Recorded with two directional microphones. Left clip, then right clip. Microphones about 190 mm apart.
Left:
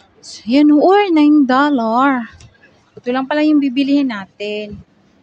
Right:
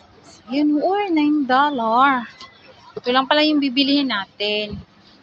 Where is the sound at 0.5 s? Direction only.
55° left (ahead or behind).